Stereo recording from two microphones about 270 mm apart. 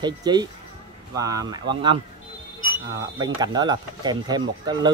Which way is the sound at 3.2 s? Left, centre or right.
Centre.